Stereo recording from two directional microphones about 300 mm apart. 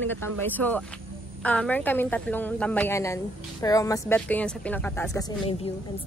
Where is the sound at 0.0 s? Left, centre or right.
Centre.